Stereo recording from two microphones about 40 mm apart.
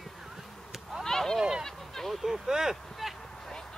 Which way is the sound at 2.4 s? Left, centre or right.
Centre.